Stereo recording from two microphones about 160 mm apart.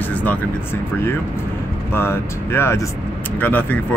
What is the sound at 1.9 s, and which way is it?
Speech, 15° left (ahead or behind).